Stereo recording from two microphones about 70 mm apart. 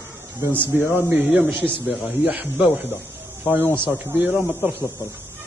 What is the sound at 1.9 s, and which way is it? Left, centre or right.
Speech, centre.